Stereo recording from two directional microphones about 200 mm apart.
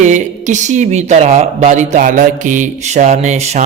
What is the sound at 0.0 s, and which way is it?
A man's voice, 35° right (ahead or behind).